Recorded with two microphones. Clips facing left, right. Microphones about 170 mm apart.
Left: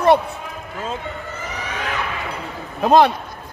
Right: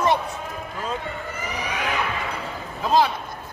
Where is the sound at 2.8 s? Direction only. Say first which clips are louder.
Left 6 dB; 65° left (ahead or behind).